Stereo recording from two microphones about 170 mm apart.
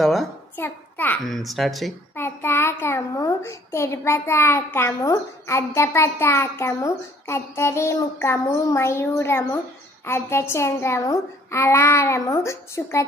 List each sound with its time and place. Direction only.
0.0 s a child's voice: centre (ahead or behind)
0.6 s a child's voice: 10° left (ahead or behind)
2.1 s a child's voice: 15° left (ahead or behind)